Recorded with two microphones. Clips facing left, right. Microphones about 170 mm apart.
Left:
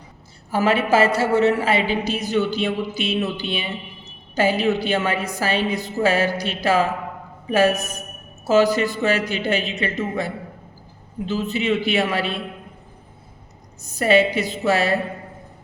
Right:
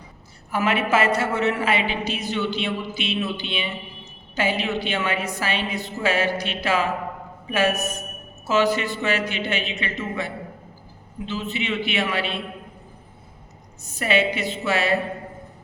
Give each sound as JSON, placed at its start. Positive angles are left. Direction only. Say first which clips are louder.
{"t": 0.5, "sound": "a man's voice", "louder": "left 3 dB", "side_deg": 35}
{"t": 14.0, "sound": "a man's voice", "louder": "left 5 dB", "side_deg": 40}